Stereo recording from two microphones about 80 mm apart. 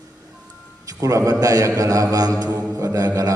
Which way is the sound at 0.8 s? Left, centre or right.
Right.